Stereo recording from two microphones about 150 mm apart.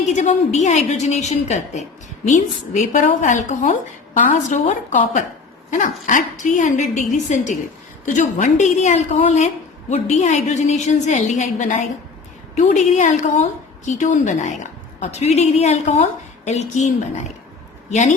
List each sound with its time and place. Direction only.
0.0 s a woman's voice: 50° left (ahead or behind)